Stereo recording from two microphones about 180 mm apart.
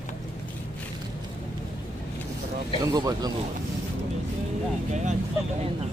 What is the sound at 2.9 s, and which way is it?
Speech, 20° right (ahead or behind).